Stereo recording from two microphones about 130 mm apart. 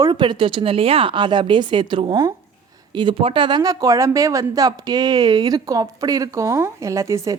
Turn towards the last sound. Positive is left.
turn(degrees=-25)  # may be behind; listen again after turning